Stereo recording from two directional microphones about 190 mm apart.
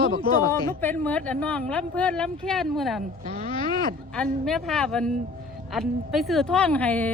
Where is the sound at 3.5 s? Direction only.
25° left (ahead or behind).